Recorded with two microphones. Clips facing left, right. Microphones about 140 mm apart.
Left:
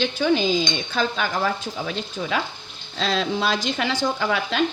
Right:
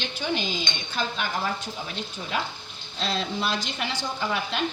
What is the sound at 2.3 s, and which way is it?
Speech, 90° left.